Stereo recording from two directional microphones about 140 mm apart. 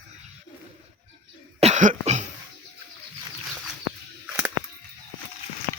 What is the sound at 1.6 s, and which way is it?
Cough, 60° right (ahead or behind).